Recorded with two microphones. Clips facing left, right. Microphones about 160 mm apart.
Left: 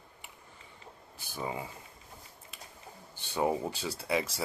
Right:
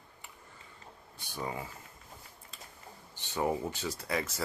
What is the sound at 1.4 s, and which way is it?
Speech, 15° left (ahead or behind).